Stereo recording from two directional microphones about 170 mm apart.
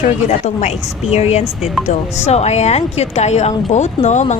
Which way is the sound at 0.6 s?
40° left (ahead or behind).